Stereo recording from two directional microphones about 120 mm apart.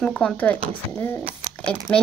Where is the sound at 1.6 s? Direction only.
10° left (ahead or behind).